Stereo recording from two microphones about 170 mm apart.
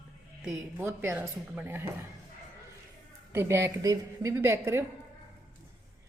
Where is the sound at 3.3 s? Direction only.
15° right (ahead or behind).